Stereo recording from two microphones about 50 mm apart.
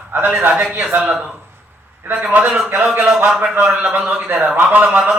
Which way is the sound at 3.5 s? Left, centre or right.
Right.